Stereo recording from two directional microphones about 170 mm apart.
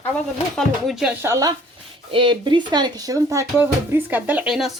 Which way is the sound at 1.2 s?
20° right (ahead or behind).